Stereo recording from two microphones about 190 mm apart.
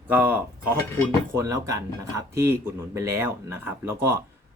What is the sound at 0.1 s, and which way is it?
Speech, 10° right (ahead or behind).